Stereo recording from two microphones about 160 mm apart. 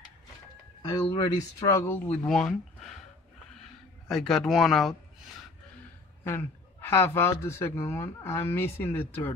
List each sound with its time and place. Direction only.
0.8 s speech: 30° left (ahead or behind); by 2.1 s 15° left (ahead or behind)
2.2 s speech: 5° left (ahead or behind)
4.1 s speech: 5° left (ahead or behind)
6.2 s a man's voice: 15° left (ahead or behind)